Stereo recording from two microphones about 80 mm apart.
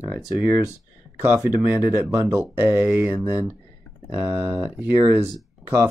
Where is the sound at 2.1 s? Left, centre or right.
Right.